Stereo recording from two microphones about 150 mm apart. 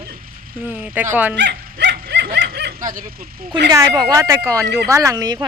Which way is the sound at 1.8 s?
90° right.